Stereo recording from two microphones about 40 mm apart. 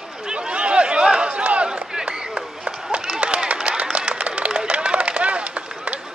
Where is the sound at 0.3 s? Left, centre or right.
Right.